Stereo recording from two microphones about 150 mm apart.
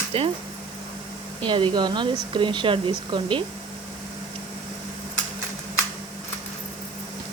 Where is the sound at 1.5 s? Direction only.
35° right (ahead or behind).